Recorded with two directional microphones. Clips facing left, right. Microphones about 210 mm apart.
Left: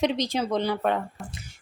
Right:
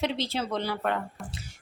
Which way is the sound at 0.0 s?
15° left (ahead or behind).